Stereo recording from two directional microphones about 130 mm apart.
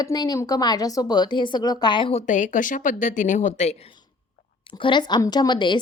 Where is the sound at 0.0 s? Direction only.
30° left (ahead or behind).